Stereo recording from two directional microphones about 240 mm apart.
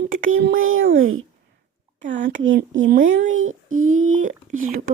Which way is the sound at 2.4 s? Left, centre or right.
Right.